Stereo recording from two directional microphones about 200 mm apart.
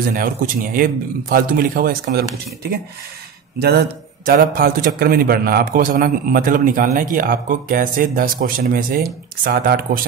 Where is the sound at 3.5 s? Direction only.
50° right (ahead or behind).